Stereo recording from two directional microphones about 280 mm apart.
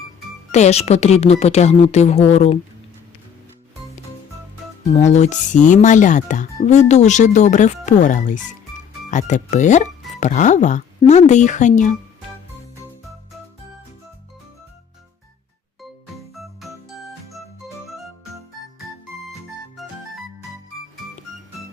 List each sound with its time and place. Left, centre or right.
0.5 s speech: left
4.9 s speech: left
16.3 s music: centre
19.8 s music: centre